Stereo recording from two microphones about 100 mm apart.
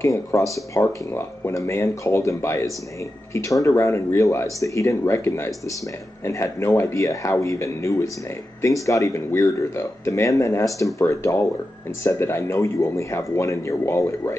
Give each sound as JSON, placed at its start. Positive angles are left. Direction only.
{"t": 0.0, "sound": "speech", "side_deg": 30}